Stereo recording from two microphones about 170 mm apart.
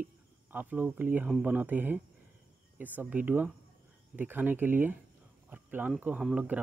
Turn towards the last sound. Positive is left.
turn(degrees=-5)  # may be behind; listen again after turning